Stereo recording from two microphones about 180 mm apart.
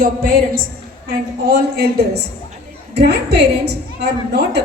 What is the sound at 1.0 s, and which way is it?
Speech, 60° right (ahead or behind).